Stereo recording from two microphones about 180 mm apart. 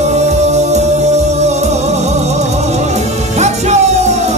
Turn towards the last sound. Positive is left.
turn(degrees=-40)  # may be behind; listen again after turning